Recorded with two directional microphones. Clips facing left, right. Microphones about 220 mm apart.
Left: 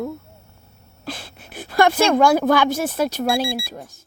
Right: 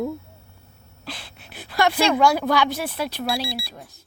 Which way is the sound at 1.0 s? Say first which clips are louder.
Left 5 dB; 45° left (ahead or behind).